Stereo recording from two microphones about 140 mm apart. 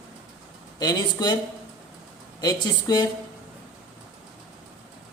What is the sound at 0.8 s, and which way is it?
Speech, 30° left (ahead or behind).